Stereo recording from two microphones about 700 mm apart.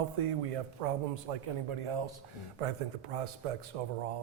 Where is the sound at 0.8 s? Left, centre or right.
Right.